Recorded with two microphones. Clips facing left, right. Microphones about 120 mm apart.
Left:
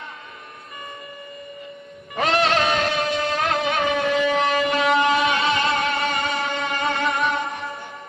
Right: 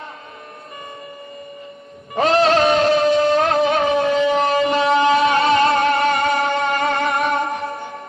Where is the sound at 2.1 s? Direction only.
35° right (ahead or behind).